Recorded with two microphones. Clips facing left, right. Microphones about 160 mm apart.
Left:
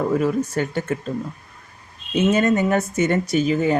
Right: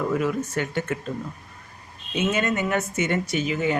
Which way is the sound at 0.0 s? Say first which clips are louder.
Left 4 dB; 35° left (ahead or behind).